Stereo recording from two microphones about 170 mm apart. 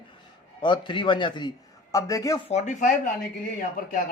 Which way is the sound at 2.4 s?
45° left (ahead or behind).